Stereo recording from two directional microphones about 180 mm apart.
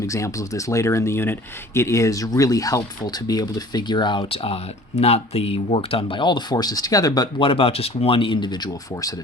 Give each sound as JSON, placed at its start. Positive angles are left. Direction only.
{"t": 0.0, "sound": "speech", "side_deg": 15}